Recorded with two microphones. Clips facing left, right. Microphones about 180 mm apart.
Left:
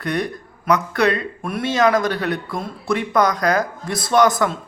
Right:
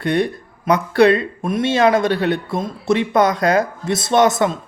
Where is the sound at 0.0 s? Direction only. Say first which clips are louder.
Right 5 dB; 30° right (ahead or behind).